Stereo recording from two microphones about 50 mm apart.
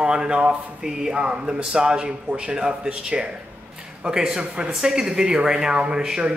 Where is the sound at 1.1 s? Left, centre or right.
Right.